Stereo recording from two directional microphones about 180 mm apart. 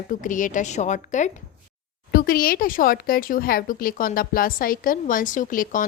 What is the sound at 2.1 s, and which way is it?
Speech, 55° left (ahead or behind).